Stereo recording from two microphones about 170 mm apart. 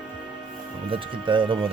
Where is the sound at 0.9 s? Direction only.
30° right (ahead or behind).